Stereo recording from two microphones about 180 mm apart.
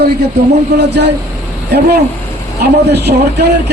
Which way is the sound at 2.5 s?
65° right (ahead or behind).